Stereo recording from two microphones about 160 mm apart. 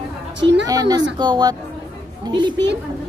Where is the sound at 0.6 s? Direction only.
25° right (ahead or behind).